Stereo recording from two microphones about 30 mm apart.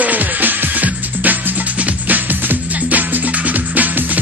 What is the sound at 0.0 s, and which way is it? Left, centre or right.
Music, right.